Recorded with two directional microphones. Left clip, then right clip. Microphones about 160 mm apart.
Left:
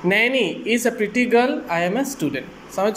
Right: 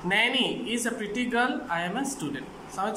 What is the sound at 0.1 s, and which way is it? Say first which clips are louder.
Speech: left 5 dB; 25° left (ahead or behind).